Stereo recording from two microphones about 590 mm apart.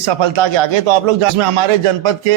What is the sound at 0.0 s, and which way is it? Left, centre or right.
Speech, right.